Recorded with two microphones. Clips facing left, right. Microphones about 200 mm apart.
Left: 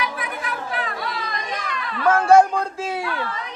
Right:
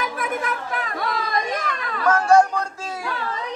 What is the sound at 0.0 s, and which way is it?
Chatter, 45° right (ahead or behind).